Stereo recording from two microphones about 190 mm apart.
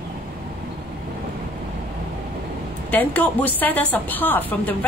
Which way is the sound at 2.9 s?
10° left (ahead or behind).